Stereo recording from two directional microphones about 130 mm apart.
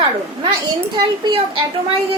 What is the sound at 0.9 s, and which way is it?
Speech, 35° right (ahead or behind).